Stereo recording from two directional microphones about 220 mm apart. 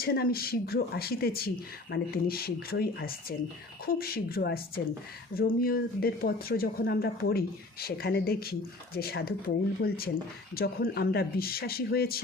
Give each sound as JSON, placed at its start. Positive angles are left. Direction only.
{"t": 0.0, "sound": "speech", "side_deg": 45}